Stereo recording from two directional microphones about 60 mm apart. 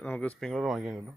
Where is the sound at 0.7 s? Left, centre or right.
Centre.